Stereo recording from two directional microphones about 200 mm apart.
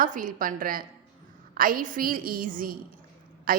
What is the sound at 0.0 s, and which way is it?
A woman's voice, 40° right (ahead or behind).